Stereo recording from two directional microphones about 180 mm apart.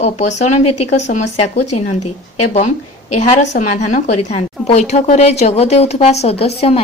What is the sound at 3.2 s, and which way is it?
A woman's voice, 40° left (ahead or behind).